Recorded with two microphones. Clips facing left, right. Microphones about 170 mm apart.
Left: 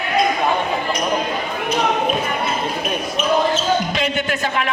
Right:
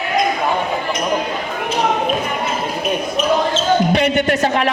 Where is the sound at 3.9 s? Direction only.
70° right (ahead or behind).